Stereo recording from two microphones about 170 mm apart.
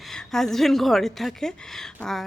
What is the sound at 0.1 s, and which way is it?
A woman's voice, 5° left (ahead or behind).